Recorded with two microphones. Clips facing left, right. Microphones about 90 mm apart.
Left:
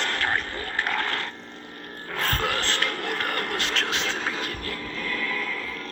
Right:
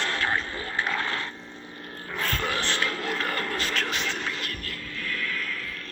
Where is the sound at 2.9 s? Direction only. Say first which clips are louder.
Left 1 dB; 55° left (ahead or behind).